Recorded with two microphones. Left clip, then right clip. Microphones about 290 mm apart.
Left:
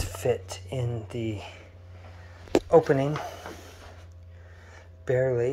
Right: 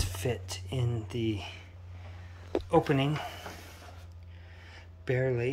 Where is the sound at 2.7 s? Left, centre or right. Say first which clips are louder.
Left 6 dB; centre.